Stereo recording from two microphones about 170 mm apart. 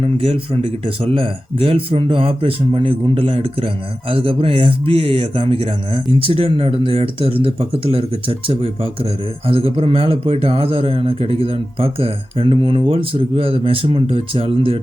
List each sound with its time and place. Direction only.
0.0 s a man's voice: 35° right (ahead or behind)